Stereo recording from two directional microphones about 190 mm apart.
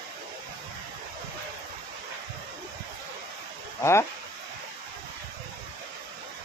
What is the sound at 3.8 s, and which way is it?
Speech, 15° left (ahead or behind).